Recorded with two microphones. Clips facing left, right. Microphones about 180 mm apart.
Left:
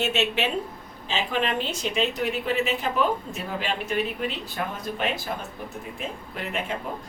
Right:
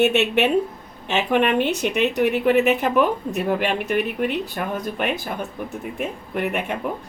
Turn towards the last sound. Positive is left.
turn(degrees=-65)  # may be behind; listen again after turning